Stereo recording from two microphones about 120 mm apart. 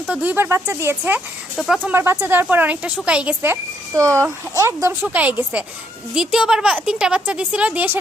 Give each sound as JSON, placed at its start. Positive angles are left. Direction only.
{"t": 0.1, "sound": "speech", "side_deg": -10}
{"t": 1.5, "sound": "speech", "side_deg": 0}
{"t": 1.9, "sound": "speech", "side_deg": -20}
{"t": 5.0, "sound": "speech", "side_deg": -15}